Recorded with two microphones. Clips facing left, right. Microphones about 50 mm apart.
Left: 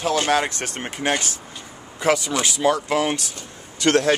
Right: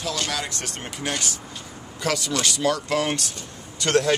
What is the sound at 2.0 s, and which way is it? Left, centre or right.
Speech, left.